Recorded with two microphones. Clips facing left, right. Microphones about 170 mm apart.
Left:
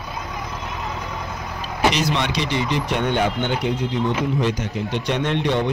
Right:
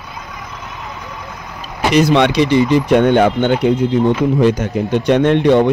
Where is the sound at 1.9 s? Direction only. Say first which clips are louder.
Right 11 dB; 60° right (ahead or behind).